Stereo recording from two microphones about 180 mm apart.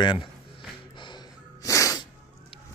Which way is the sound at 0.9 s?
25° left (ahead or behind).